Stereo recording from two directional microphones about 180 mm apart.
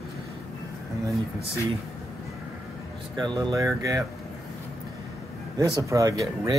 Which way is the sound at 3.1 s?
25° right (ahead or behind).